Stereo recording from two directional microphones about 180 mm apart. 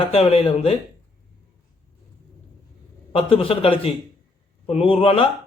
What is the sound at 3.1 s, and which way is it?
A man's voice, 30° left (ahead or behind).